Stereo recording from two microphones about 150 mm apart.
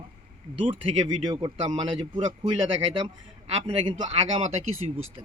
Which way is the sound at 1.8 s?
30° right (ahead or behind).